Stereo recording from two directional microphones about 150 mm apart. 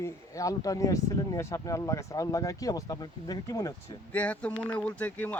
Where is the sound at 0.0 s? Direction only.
20° left (ahead or behind).